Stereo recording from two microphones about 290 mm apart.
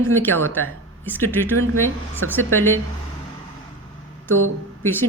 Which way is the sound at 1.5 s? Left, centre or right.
Right.